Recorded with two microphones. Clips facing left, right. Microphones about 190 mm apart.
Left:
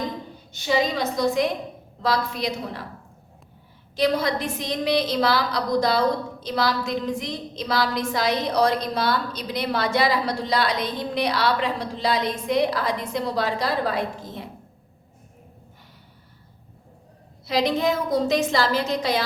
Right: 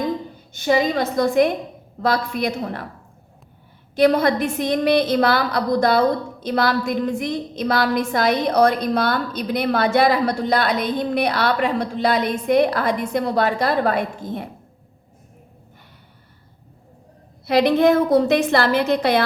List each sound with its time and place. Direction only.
0.5 s a woman's voice: 50° right (ahead or behind)
3.9 s a woman's voice: 55° right (ahead or behind)
17.4 s a woman's voice: 60° right (ahead or behind)